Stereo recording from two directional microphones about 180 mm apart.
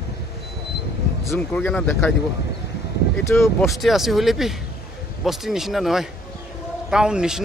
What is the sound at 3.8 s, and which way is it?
A man's voice, centre (ahead or behind).